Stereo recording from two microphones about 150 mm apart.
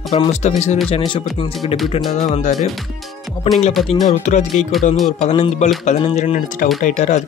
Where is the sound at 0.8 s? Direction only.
35° left (ahead or behind).